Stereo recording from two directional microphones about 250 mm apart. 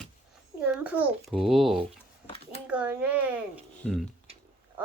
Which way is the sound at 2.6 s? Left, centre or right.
Centre.